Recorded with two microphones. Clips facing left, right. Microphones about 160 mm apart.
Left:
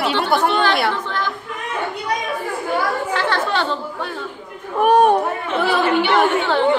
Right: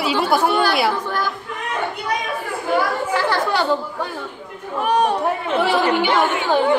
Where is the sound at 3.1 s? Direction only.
10° right (ahead or behind).